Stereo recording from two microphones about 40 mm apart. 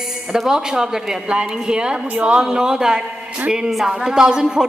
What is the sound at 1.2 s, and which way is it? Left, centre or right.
Speech, right.